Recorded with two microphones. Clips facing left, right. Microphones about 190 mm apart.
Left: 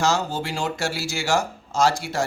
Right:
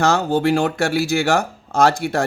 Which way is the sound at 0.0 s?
60° right (ahead or behind).